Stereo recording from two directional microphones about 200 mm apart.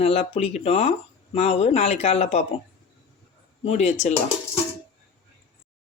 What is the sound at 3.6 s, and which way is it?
Speech, 35° left (ahead or behind).